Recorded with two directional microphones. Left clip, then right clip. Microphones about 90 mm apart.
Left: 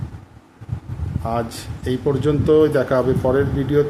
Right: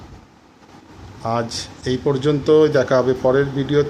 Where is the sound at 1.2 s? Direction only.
5° left (ahead or behind).